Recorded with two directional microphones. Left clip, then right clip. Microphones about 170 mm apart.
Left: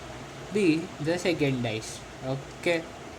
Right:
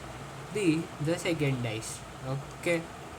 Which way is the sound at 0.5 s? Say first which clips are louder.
Left 4 dB; 15° left (ahead or behind).